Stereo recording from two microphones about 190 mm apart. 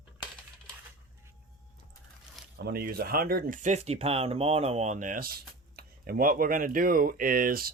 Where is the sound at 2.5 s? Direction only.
55° right (ahead or behind).